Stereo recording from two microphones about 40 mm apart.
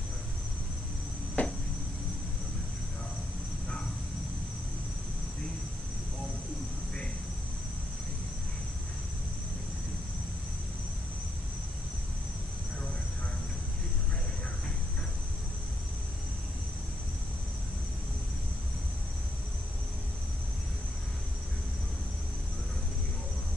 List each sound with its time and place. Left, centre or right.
1.4 s cricket: left